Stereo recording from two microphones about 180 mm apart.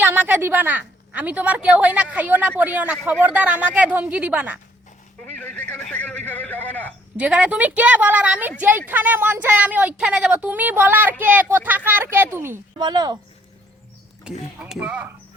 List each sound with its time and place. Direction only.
0.0 s a woman's voice: 10° right (ahead or behind)
5.2 s a sound: 10° left (ahead or behind)
7.2 s a woman's voice: 5° right (ahead or behind)
12.8 s speech: 25° right (ahead or behind)
14.3 s a woman's voice: 5° right (ahead or behind)